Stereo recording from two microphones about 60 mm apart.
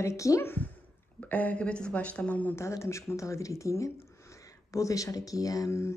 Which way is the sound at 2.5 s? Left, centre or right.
Left.